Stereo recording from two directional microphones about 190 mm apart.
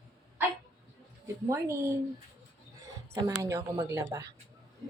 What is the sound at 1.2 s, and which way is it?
Speech, 15° right (ahead or behind).